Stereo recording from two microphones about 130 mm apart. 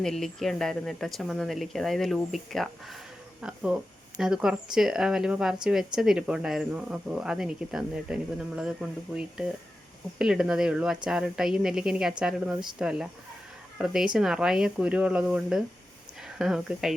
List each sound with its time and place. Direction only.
0.0 s speech: 5° left (ahead or behind)